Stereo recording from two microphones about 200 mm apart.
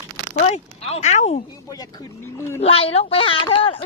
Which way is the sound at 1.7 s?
20° left (ahead or behind).